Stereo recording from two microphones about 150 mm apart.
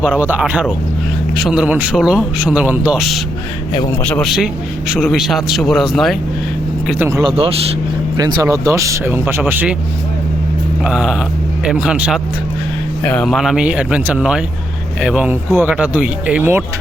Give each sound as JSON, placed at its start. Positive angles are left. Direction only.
{"t": 0.0, "sound": "speech", "side_deg": -10}
{"t": 4.0, "sound": "speech", "side_deg": 5}
{"t": 7.2, "sound": "speech", "side_deg": -35}
{"t": 10.8, "sound": "speech", "side_deg": -5}
{"t": 13.0, "sound": "speech", "side_deg": 10}
{"t": 13.2, "sound": "speech", "side_deg": 0}